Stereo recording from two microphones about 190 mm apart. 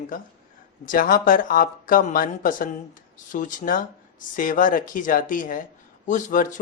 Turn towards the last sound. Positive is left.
turn(degrees=40)  # may be behind; listen again after turning